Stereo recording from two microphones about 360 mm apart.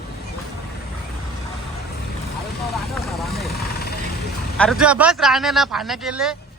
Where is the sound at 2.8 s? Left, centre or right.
Centre.